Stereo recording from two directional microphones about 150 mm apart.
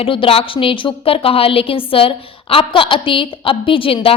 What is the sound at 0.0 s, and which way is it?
A woman's voice, 35° left (ahead or behind).